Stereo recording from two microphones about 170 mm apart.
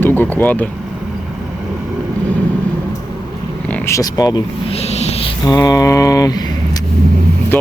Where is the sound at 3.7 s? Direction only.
15° left (ahead or behind).